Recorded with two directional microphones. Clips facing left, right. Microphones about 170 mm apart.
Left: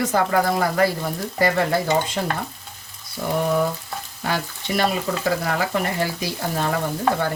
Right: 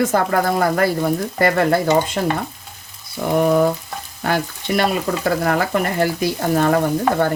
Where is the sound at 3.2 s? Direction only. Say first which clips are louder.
Right 4 dB; 60° right (ahead or behind).